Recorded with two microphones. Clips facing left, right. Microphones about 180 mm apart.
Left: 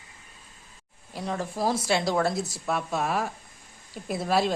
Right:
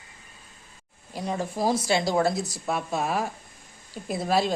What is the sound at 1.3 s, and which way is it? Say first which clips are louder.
Speech: right 1 dB; 20° right (ahead or behind).